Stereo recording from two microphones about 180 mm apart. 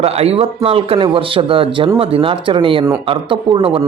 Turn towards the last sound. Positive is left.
turn(degrees=-30)  # may be behind; listen again after turning